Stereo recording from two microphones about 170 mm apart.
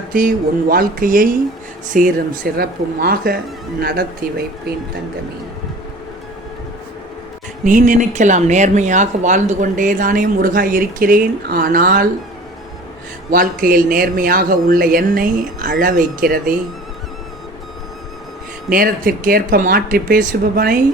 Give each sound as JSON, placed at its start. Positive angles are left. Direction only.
{"t": 0.1, "sound": "speech", "side_deg": -55}
{"t": 7.6, "sound": "a woman's voice", "side_deg": -50}
{"t": 13.3, "sound": "speech", "side_deg": -55}
{"t": 18.7, "sound": "speech", "side_deg": -60}